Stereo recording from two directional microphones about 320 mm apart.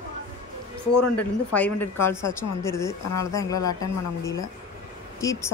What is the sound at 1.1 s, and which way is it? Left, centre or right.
Speech, centre.